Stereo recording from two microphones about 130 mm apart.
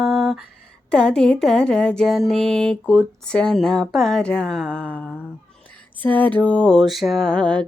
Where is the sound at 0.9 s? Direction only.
5° left (ahead or behind).